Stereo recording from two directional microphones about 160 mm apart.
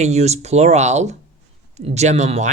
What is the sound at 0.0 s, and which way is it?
Speech, 45° right (ahead or behind).